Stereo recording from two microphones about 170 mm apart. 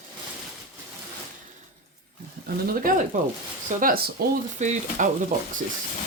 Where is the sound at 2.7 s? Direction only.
55° right (ahead or behind).